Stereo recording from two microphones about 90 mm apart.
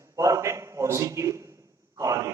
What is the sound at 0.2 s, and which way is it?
A man's voice, 35° right (ahead or behind).